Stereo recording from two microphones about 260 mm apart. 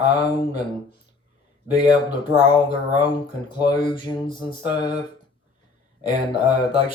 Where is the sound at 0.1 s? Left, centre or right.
Centre.